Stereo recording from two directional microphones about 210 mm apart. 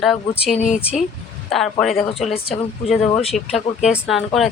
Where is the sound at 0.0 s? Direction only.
Centre (ahead or behind).